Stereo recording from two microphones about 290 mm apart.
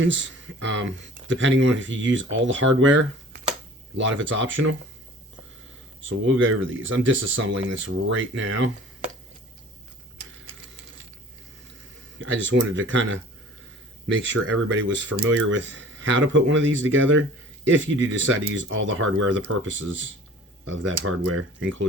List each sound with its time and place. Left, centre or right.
0.0 s speech: right
6.0 s speech: right
12.2 s speech: right